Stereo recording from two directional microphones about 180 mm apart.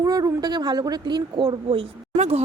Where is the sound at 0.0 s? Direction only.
20° right (ahead or behind).